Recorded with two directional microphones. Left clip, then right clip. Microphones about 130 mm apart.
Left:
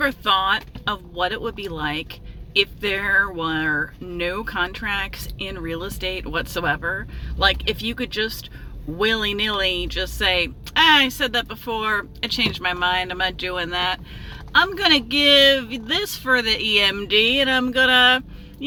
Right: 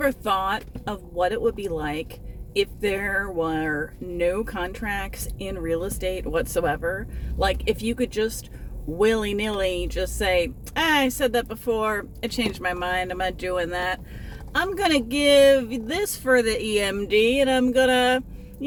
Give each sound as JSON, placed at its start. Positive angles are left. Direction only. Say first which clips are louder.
{"t": 0.1, "sound": "speech", "louder": "left 5 dB", "side_deg": -30}
{"t": 7.3, "sound": "speech", "louder": "left 4 dB", "side_deg": -40}